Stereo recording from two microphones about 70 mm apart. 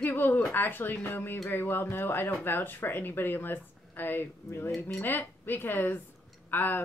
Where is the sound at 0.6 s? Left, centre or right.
Left.